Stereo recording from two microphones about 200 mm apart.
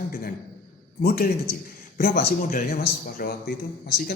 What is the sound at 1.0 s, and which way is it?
Speech, 50° left (ahead or behind).